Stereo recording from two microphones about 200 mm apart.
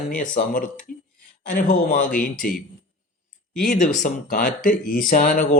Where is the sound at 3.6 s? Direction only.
40° left (ahead or behind).